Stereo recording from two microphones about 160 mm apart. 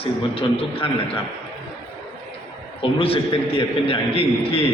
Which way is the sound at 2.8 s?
35° left (ahead or behind).